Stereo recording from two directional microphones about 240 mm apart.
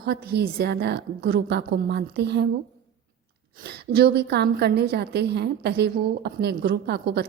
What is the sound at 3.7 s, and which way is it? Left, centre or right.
A woman's voice, right.